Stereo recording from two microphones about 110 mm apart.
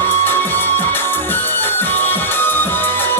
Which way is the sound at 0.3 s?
20° left (ahead or behind).